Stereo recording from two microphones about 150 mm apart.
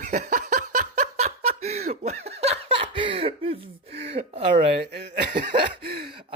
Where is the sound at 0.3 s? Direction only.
60° right (ahead or behind); by 4.4 s 40° right (ahead or behind).